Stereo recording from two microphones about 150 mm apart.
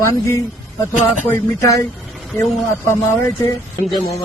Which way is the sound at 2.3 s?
Centre (ahead or behind).